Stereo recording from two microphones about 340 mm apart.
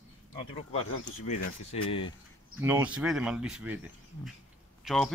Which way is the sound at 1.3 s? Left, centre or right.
Left.